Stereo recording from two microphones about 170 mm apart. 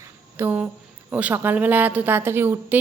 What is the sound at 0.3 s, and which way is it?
A woman's voice, 10° right (ahead or behind).